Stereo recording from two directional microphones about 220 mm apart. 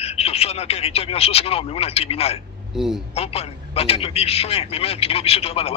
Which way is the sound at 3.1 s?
25° left (ahead or behind).